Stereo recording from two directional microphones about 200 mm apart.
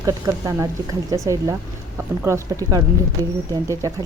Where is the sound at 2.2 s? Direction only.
15° right (ahead or behind).